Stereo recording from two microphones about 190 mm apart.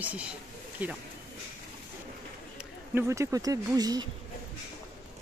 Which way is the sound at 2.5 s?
15° right (ahead or behind).